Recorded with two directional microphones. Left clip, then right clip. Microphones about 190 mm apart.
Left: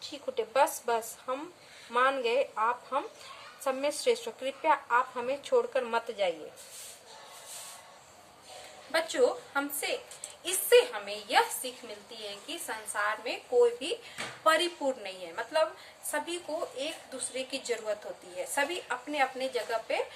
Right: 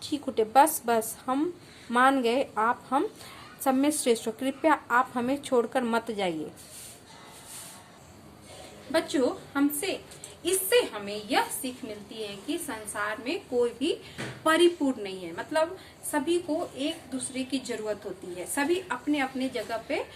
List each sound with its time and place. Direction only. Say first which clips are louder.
0.0 s a woman's voice: right 6 dB; 35° right (ahead or behind)
8.9 s a woman's voice: right 1 dB; 10° left (ahead or behind)